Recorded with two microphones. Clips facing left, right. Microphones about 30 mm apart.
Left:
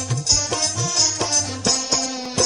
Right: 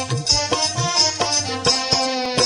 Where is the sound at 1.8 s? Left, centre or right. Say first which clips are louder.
Right 5 dB; right.